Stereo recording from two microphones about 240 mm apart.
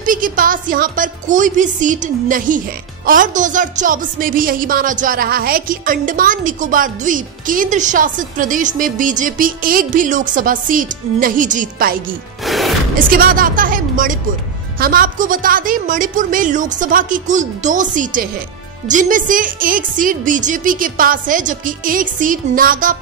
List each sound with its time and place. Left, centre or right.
0.0 s a woman's voice: right
12.4 s music: centre
13.1 s a woman's voice: right